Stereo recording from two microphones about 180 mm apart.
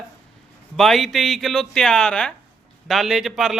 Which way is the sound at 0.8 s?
Centre (ahead or behind).